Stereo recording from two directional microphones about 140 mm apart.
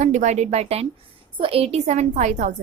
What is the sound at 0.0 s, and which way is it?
A woman's voice, 55° right (ahead or behind).